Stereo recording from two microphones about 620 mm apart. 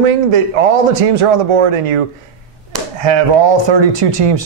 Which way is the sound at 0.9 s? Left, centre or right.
Right.